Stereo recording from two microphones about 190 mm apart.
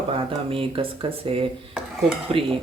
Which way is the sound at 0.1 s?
30° right (ahead or behind).